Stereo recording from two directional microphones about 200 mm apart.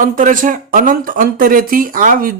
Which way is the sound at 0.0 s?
40° right (ahead or behind).